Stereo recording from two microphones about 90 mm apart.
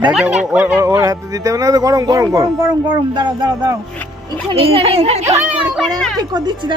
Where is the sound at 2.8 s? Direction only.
60° right (ahead or behind).